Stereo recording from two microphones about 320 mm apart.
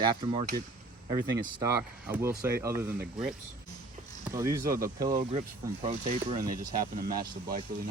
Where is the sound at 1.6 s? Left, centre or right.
Centre.